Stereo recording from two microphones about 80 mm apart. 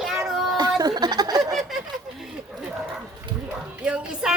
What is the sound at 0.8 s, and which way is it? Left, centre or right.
Snicker, right.